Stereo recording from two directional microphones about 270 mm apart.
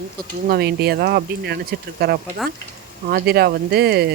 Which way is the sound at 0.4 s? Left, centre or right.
Right.